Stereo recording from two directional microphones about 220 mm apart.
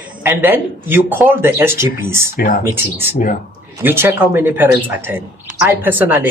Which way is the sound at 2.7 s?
10° right (ahead or behind).